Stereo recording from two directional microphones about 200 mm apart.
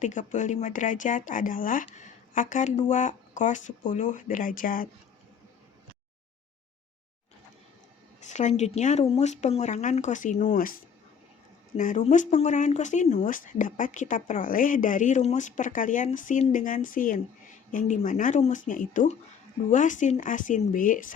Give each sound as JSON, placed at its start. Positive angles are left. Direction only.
{"t": 0.0, "sound": "speech", "side_deg": 40}
{"t": 8.2, "sound": "speech", "side_deg": 35}
{"t": 11.8, "sound": "speech", "side_deg": 40}